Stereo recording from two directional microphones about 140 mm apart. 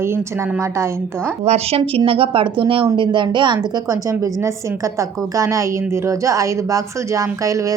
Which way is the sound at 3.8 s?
20° right (ahead or behind).